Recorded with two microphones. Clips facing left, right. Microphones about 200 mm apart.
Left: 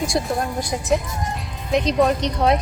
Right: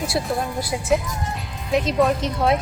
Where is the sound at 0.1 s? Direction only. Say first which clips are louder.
Left 1 dB; 5° right (ahead or behind).